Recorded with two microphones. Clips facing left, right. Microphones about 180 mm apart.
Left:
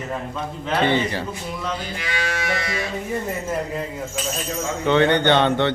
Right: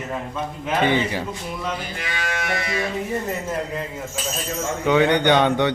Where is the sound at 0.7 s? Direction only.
15° right (ahead or behind).